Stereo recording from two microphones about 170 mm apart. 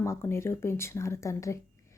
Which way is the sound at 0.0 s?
15° left (ahead or behind).